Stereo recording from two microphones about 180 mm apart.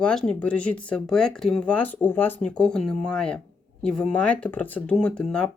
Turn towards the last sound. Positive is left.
turn(degrees=5)  # may be behind; listen again after turning